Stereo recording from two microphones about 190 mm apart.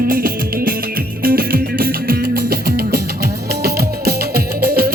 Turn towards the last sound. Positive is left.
turn(degrees=-55)  # may be behind; listen again after turning